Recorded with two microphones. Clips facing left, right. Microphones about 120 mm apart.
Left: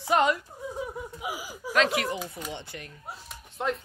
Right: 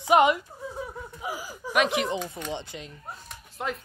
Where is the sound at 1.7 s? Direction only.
20° right (ahead or behind).